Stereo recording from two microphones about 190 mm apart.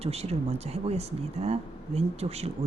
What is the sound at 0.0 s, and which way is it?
Speech, 35° right (ahead or behind).